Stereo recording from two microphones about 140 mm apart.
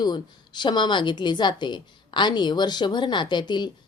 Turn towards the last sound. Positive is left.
turn(degrees=30)  # may be behind; listen again after turning